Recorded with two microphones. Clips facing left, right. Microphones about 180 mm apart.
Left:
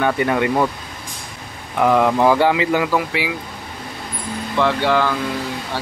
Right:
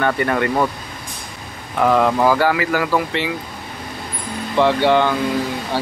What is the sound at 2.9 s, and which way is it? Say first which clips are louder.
Speech: right 1 dB; 5° left (ahead or behind).